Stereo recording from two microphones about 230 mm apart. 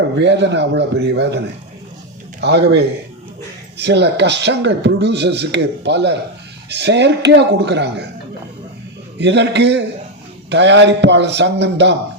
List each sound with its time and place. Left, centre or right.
0.2 s speech: right
2.4 s speech: right
9.1 s speech: right